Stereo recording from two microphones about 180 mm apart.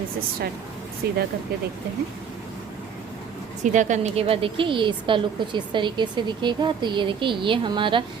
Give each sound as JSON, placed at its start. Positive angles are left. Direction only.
{"t": 1.0, "sound": "speech", "side_deg": -65}
{"t": 3.6, "sound": "a woman's voice", "side_deg": -45}